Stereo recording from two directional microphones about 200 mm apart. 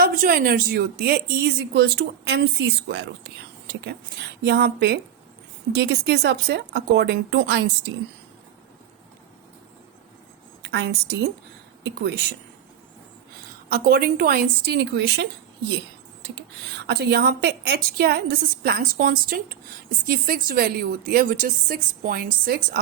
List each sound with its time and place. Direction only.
0.0 s a woman's voice: 45° right (ahead or behind)
10.6 s a woman's voice: 55° right (ahead or behind)
13.7 s a woman's voice: 45° right (ahead or behind)
16.7 s a woman's voice: 55° right (ahead or behind)